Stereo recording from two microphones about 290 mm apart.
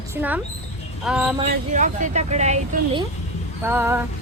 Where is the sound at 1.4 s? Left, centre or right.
Right.